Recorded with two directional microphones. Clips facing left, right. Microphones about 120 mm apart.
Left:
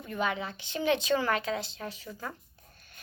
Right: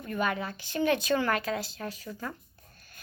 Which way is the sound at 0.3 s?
20° left (ahead or behind).